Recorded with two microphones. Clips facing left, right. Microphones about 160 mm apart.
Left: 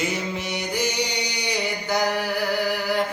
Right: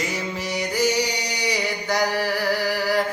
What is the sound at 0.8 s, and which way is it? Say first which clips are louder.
Music: right 5 dB; centre (ahead or behind).